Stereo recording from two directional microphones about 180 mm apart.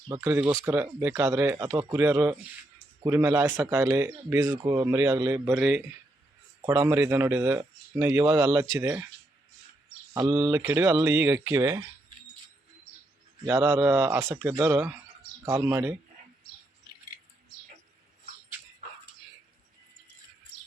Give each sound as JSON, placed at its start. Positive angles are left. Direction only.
{"t": 0.1, "sound": "speech", "side_deg": -15}
{"t": 10.4, "sound": "speech", "side_deg": -15}
{"t": 13.4, "sound": "speech", "side_deg": -15}